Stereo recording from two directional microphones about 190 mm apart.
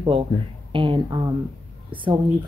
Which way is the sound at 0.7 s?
25° right (ahead or behind).